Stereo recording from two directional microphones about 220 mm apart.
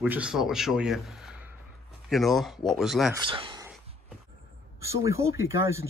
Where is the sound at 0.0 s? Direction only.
5° right (ahead or behind).